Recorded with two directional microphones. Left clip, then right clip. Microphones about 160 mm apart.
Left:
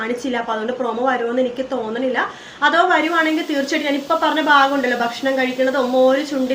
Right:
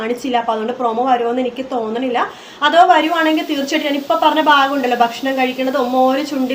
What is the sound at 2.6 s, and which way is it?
Speech, 20° right (ahead or behind).